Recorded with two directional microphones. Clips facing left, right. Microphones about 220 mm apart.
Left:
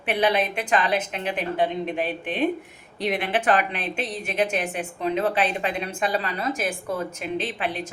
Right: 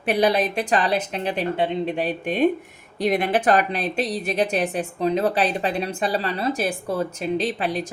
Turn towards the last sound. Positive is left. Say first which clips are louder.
# right 4 dB
turn(degrees=-40)  # may be behind; listen again after turning